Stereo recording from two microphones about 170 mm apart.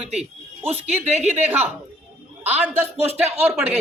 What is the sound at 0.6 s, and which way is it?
Speech, 40° right (ahead or behind).